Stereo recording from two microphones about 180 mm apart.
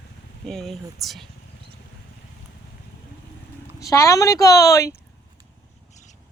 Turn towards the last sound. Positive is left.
turn(degrees=15)  # may be behind; listen again after turning